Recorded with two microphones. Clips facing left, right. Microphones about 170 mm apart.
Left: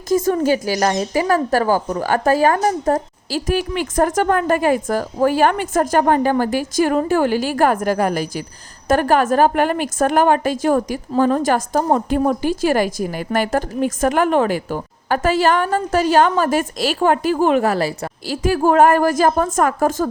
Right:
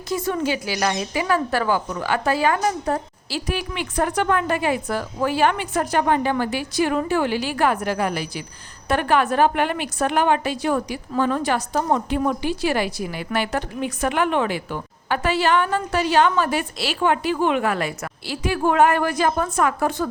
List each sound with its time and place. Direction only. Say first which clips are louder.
0.1 s a woman's voice: left 7 dB; 45° left (ahead or behind)